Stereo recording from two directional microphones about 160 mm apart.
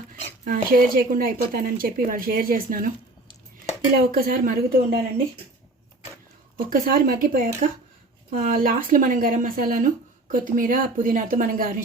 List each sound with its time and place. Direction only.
0.4 s a woman's voice: 65° right (ahead or behind)
4.1 s a woman's voice: 65° right (ahead or behind)
6.7 s a woman's voice: 65° right (ahead or behind)